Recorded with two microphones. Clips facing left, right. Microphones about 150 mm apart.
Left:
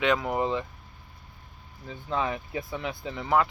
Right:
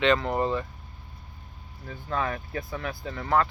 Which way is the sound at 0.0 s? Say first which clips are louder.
Right 2 dB; 10° left (ahead or behind).